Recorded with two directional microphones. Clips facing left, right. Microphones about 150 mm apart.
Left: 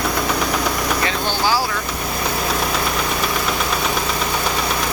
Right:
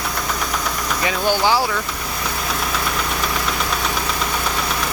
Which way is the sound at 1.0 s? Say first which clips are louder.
Right 7 dB; 20° right (ahead or behind).